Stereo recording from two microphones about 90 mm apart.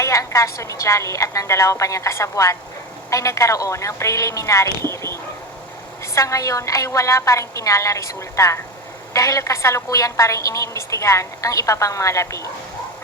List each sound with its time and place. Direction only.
0.0 s a woman's voice: 35° left (ahead or behind)